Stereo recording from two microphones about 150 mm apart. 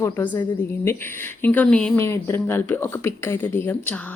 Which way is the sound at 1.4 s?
10° left (ahead or behind).